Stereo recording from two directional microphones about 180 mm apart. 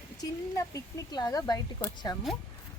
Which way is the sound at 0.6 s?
20° left (ahead or behind).